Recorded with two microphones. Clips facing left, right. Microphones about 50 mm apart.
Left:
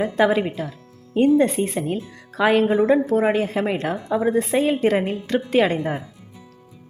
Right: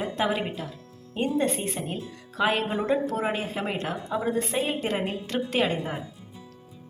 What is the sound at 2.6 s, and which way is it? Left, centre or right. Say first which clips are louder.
Speech: left 8 dB; left.